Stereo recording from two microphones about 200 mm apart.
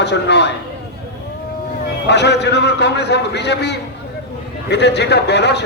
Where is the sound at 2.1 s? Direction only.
60° left (ahead or behind).